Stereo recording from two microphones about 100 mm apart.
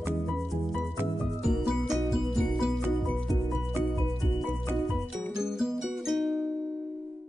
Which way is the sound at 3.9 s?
Centre (ahead or behind).